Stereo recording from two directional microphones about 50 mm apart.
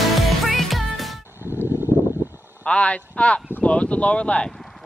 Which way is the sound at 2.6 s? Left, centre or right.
Left.